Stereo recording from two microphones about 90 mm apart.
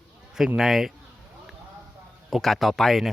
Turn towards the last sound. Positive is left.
turn(degrees=0)  # may be behind; listen again after turning